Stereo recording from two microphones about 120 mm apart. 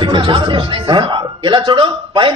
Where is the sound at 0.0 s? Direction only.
40° right (ahead or behind).